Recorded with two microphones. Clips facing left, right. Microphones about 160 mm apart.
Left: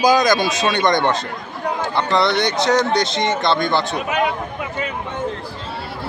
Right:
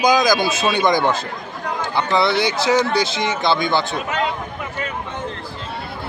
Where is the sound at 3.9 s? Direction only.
15° left (ahead or behind).